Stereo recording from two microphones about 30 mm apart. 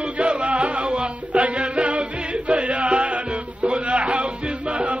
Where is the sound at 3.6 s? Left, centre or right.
Right.